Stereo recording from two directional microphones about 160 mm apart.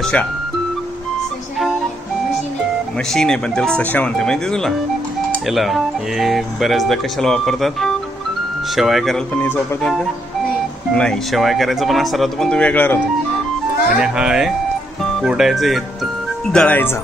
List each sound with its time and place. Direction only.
0.0 s speech: 10° left (ahead or behind)
3.1 s speech: 5° left (ahead or behind)
10.9 s speech: 5° left (ahead or behind)
13.9 s speech: 5° right (ahead or behind)
16.5 s speech: 10° left (ahead or behind)